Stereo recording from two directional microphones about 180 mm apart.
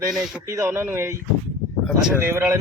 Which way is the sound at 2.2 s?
15° right (ahead or behind).